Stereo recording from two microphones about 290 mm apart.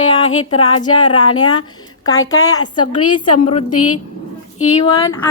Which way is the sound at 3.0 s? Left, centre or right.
Left.